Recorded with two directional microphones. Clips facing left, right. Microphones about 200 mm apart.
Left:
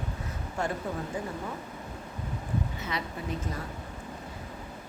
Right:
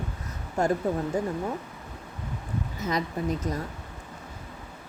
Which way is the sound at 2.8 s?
40° right (ahead or behind).